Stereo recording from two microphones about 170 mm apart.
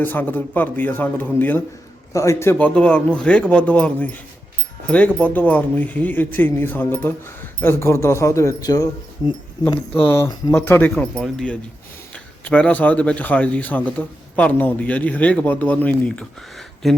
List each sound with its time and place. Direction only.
0.0 s speech: 10° left (ahead or behind)
9.9 s speech: 10° left (ahead or behind)
11.1 s speech: 5° right (ahead or behind)
12.1 s speech: 10° left (ahead or behind)